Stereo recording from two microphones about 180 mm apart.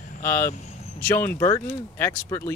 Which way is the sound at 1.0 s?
15° left (ahead or behind).